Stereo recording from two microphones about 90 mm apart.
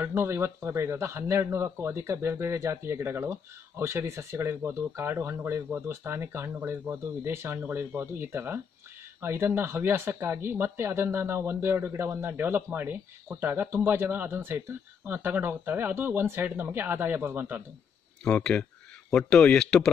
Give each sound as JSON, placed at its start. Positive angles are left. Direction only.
{"t": 0.0, "sound": "speech", "side_deg": -25}
{"t": 18.2, "sound": "speech", "side_deg": 10}